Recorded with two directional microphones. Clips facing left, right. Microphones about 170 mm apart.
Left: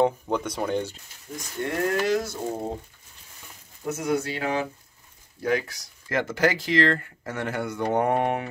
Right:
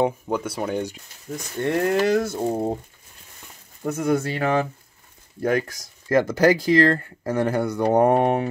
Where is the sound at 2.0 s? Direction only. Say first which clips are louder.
Right 4 dB; 55° right (ahead or behind).